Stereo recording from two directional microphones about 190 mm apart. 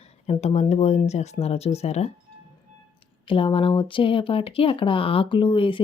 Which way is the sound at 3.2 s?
30° left (ahead or behind).